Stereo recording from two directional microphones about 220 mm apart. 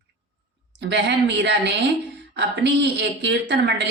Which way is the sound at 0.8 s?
50° right (ahead or behind).